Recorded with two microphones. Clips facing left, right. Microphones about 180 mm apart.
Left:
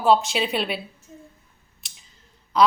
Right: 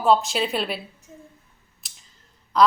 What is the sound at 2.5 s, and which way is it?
Speech, centre (ahead or behind).